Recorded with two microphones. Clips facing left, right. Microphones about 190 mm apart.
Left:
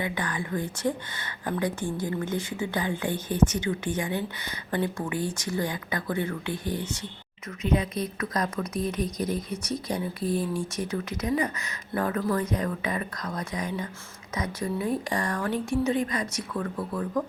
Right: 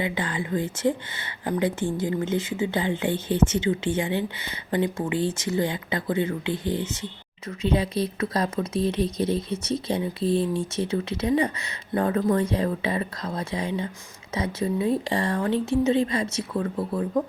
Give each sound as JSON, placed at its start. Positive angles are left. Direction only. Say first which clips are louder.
{"t": 0.0, "sound": "speech", "louder": "right 3 dB", "side_deg": -25}